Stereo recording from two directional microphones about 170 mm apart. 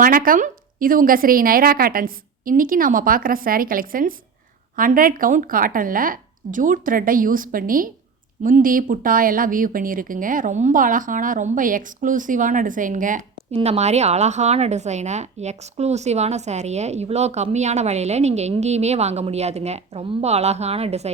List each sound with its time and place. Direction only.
0.0 s a woman's voice: 55° right (ahead or behind)
13.5 s speech: 40° right (ahead or behind)